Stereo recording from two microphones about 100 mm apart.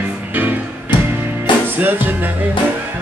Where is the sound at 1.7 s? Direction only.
20° right (ahead or behind).